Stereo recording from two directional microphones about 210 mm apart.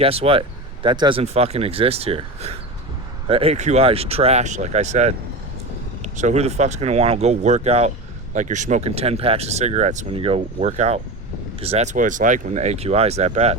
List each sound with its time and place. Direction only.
0.0 s speech: 25° right (ahead or behind)